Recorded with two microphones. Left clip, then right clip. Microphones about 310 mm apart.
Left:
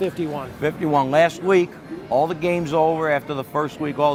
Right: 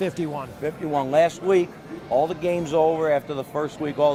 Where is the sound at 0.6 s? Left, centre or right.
Left.